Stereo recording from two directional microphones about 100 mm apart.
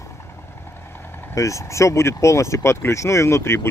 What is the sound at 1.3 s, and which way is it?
Speech, 30° left (ahead or behind).